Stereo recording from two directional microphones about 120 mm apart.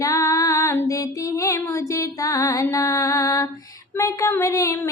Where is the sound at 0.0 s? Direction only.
25° left (ahead or behind).